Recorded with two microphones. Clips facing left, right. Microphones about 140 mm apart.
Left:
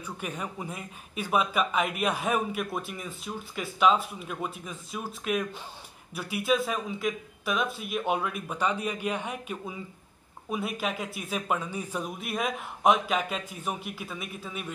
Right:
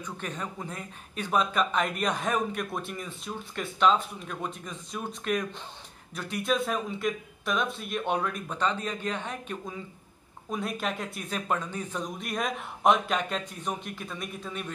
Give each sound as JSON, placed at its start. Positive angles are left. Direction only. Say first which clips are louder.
{"t": 0.0, "sound": "speech", "louder": "even", "side_deg": 10}